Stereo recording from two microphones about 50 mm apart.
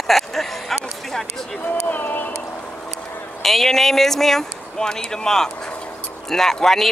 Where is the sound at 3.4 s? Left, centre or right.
Centre.